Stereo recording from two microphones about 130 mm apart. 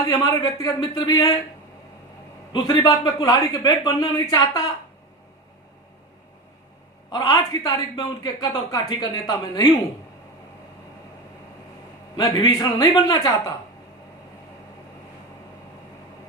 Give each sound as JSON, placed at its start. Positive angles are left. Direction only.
{"t": 0.1, "sound": "speech", "side_deg": 30}
{"t": 2.5, "sound": "speech", "side_deg": 30}
{"t": 7.1, "sound": "speech", "side_deg": 30}
{"t": 12.1, "sound": "speech", "side_deg": 30}